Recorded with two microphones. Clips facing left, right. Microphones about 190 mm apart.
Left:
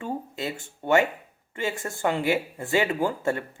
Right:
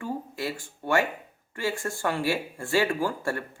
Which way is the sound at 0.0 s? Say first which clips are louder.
Left 1 dB; 20° left (ahead or behind).